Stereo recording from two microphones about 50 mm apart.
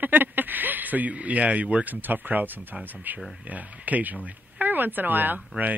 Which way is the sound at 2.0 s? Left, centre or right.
Right.